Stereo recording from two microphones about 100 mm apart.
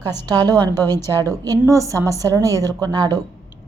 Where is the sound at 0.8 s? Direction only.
25° left (ahead or behind).